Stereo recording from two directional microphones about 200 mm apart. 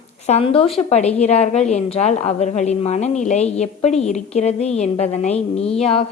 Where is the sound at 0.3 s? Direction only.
30° left (ahead or behind).